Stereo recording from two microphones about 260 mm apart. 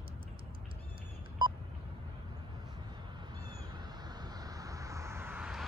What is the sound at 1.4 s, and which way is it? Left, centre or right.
Telephone dialing, centre.